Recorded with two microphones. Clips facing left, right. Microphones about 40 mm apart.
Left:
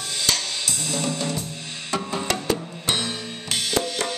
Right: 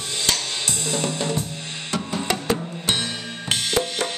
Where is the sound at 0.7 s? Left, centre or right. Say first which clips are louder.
Right 2 dB; centre.